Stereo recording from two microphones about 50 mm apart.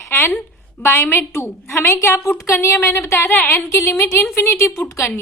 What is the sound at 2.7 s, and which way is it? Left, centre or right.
Speech, left.